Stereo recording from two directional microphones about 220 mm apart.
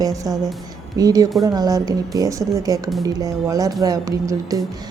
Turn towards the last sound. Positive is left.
turn(degrees=-15)  # may be behind; listen again after turning